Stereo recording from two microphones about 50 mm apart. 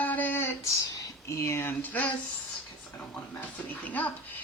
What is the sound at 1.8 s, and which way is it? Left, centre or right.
Speech, left.